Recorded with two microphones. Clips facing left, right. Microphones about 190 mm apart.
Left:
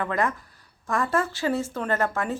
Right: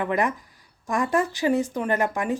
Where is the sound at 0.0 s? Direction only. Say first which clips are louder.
Right 2 dB; 15° right (ahead or behind).